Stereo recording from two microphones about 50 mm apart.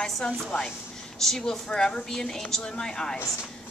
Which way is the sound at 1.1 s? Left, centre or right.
Centre.